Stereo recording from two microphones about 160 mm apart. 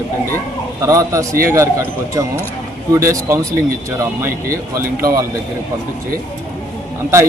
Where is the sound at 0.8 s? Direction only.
20° right (ahead or behind).